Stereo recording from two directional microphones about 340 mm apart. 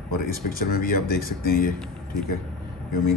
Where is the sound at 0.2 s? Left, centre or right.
Left.